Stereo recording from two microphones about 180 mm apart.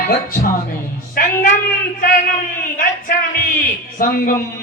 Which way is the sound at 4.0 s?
55° left (ahead or behind).